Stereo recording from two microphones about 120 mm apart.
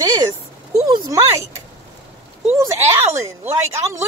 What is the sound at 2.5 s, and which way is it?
Speech, 20° right (ahead or behind).